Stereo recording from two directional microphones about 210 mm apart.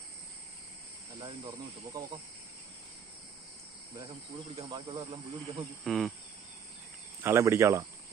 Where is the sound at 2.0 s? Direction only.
15° right (ahead or behind).